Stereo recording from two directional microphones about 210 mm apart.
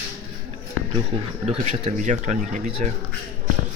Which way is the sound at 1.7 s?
35° right (ahead or behind).